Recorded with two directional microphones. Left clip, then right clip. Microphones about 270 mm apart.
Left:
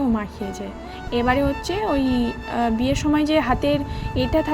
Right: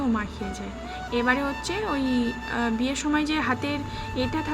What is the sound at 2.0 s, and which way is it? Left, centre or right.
Speech, left.